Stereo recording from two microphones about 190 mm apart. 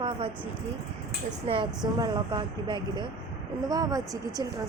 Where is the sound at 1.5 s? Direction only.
30° right (ahead or behind).